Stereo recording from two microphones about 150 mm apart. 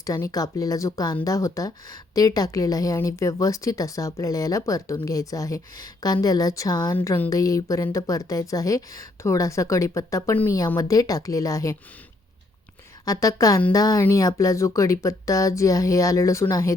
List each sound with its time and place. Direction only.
0.0 s a woman's voice: 20° left (ahead or behind)
13.1 s a woman's voice: 20° left (ahead or behind)